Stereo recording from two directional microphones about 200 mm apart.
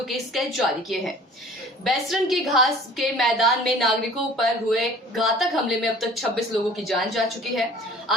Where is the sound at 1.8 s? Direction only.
Centre (ahead or behind).